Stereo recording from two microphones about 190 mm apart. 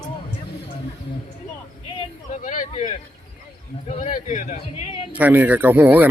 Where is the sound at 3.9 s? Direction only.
40° left (ahead or behind).